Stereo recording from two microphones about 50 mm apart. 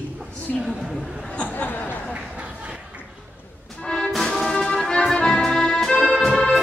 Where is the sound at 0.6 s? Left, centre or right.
Centre.